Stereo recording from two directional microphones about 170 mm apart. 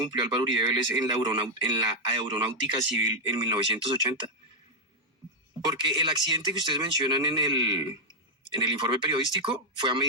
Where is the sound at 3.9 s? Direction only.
30° right (ahead or behind).